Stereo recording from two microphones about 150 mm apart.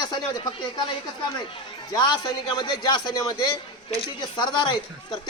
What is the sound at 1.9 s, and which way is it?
A man's voice, 30° left (ahead or behind).